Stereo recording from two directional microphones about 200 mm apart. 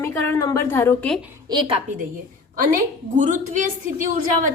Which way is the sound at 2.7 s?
40° right (ahead or behind).